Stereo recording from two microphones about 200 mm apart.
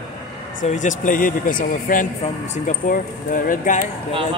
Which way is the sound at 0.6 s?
35° left (ahead or behind).